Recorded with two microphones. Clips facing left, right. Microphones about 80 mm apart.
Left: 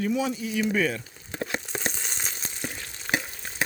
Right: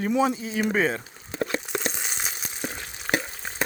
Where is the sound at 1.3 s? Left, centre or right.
Right.